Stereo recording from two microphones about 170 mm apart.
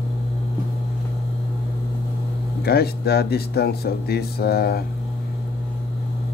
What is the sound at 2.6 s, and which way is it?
Speech, 70° left (ahead or behind).